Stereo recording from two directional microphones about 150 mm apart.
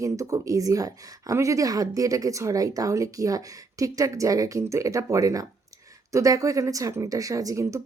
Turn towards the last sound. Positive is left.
turn(degrees=-20)  # may be behind; listen again after turning